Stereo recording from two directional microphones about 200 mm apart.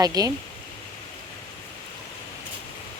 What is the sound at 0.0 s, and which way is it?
Speech, 20° right (ahead or behind).